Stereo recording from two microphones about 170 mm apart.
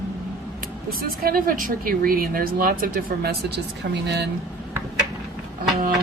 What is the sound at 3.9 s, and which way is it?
Speech, 90° right.